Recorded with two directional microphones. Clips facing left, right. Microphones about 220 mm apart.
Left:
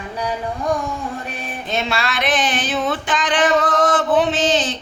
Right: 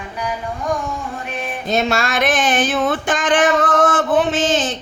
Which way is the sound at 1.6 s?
45° right (ahead or behind).